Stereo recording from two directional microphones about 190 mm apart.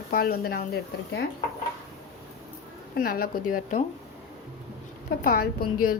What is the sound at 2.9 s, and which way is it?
Speech, 50° left (ahead or behind).